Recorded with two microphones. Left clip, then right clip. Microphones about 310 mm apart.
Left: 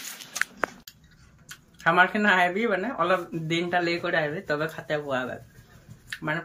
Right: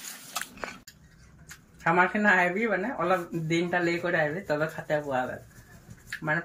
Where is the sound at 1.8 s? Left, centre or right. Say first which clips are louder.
Left 3 dB; centre.